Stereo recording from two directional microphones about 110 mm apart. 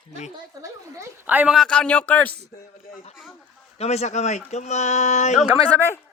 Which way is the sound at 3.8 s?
80° left.